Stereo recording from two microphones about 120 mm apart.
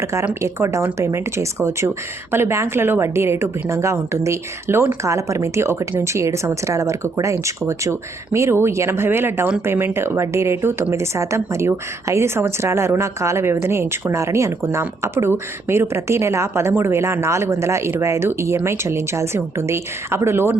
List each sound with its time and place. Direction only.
0.0 s a woman's voice: 25° right (ahead or behind)